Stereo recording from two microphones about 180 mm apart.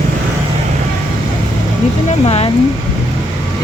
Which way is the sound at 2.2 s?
35° left (ahead or behind).